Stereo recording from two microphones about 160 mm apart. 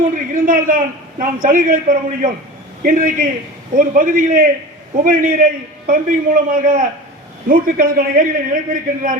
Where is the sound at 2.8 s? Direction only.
55° right (ahead or behind).